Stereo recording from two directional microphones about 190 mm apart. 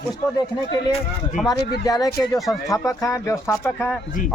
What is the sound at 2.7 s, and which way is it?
Speech, 15° left (ahead or behind).